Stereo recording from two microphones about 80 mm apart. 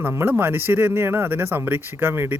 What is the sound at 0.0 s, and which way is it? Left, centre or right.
Speech, right.